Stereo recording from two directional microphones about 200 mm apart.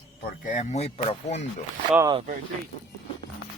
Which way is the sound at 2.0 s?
20° right (ahead or behind).